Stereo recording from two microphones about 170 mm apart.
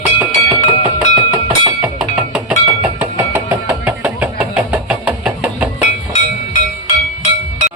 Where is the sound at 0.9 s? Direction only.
15° right (ahead or behind).